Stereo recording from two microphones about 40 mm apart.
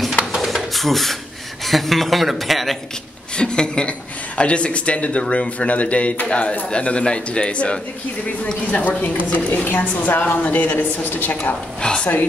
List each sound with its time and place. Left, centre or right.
0.7 s speech: centre
3.3 s a woman's voice: left
11.8 s a woman's voice: left